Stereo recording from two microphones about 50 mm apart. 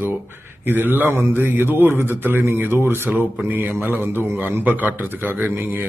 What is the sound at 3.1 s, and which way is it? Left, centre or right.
Speech, right.